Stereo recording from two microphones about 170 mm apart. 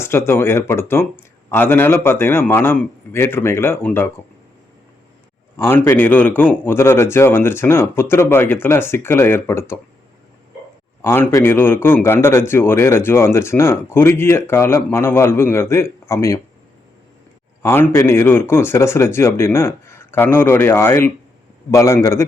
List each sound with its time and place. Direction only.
0.0 s a man's voice: 15° left (ahead or behind)
5.5 s a man's voice: 15° left (ahead or behind)
11.0 s a man's voice: 15° left (ahead or behind)
17.6 s a man's voice: 15° left (ahead or behind)